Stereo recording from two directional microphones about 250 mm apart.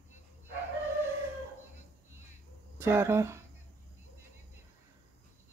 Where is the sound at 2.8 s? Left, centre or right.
Centre.